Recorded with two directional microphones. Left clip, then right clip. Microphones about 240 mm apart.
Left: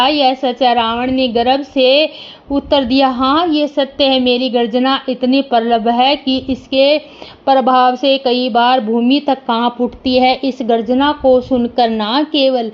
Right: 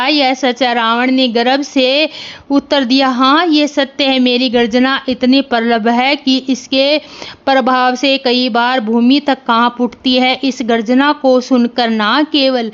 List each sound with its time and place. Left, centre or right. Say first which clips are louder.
0.0 s a woman's voice: even; right
10.1 s a woman's voice: left 1 dB; right
10.4 s a woman's voice: even; right